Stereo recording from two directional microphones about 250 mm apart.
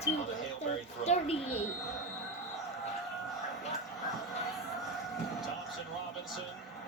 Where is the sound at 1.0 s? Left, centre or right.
Left.